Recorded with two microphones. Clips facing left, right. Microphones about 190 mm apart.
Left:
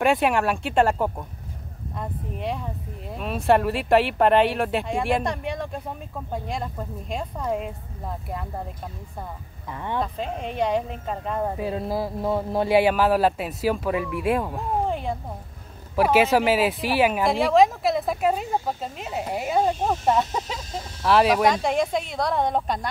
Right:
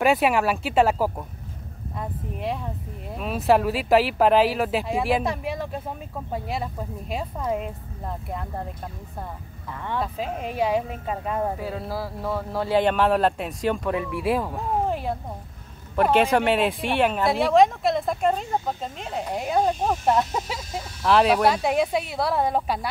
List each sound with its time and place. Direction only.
0.0 s speech: centre (ahead or behind)
9.7 s speech: 15° left (ahead or behind)
9.9 s speech: 5° right (ahead or behind)
11.6 s speech: 20° left (ahead or behind); by 22.8 s 5° right (ahead or behind)